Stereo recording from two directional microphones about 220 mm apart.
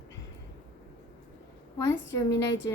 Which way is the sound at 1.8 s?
15° left (ahead or behind).